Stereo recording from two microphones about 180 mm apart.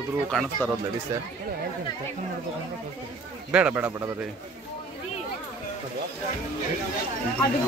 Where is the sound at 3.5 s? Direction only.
5° right (ahead or behind).